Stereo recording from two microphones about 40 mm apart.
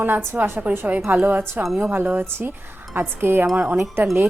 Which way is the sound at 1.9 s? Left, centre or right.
Right.